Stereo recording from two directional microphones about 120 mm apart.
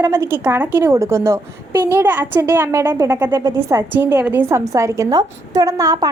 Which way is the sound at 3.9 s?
15° right (ahead or behind).